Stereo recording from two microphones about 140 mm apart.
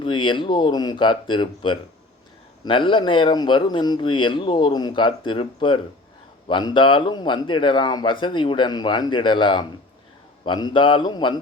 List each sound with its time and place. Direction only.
0.0 s speech: 35° left (ahead or behind)